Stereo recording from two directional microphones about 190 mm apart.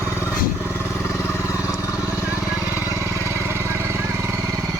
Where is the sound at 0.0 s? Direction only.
15° left (ahead or behind).